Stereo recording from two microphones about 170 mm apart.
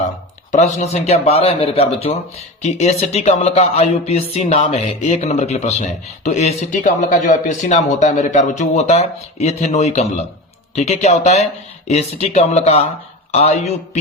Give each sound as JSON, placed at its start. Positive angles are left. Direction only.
{"t": 0.5, "sound": "speech", "side_deg": 40}